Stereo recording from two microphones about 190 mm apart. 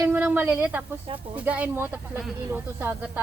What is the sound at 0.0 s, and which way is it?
A woman's voice, 10° right (ahead or behind).